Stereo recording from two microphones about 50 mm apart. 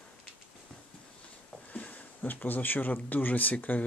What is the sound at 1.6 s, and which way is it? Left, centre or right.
Speech, left.